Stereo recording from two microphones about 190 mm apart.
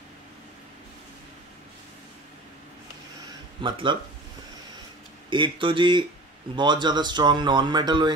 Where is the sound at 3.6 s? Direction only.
25° right (ahead or behind).